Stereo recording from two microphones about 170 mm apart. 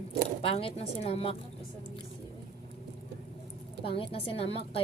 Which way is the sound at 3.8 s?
35° left (ahead or behind).